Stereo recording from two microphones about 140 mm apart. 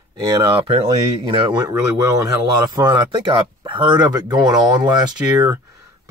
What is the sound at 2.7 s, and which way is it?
Speech, 30° right (ahead or behind).